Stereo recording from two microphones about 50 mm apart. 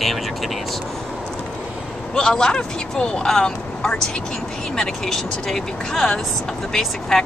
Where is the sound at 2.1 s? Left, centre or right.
Centre.